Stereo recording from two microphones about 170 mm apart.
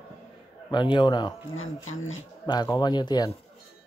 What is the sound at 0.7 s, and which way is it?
Speech, 25° left (ahead or behind).